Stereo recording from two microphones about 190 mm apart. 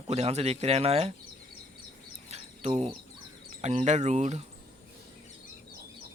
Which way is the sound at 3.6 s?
35° right (ahead or behind).